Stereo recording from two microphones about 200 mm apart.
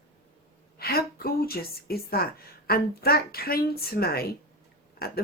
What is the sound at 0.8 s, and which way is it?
Speech, 50° left (ahead or behind).